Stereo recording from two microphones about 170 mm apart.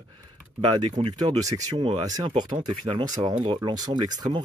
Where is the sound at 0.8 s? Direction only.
40° right (ahead or behind).